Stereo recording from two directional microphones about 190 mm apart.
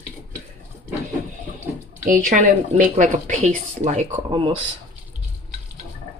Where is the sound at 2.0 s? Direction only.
45° right (ahead or behind); by 4.6 s 30° right (ahead or behind).